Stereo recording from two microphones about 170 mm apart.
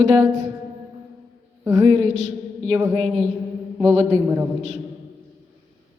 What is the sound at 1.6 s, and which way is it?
Speech, 20° right (ahead or behind).